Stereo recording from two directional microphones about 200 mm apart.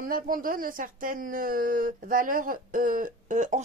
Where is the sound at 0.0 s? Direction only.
45° right (ahead or behind).